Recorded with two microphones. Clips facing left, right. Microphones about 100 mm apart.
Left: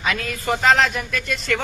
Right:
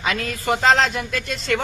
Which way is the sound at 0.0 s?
25° right (ahead or behind).